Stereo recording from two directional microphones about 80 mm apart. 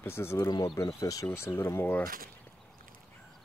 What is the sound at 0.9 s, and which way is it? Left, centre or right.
Speech, left.